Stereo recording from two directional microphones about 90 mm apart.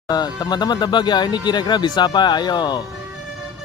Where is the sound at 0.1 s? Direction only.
50° left (ahead or behind).